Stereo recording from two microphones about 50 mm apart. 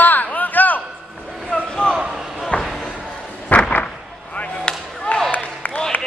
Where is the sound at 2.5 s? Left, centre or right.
Left.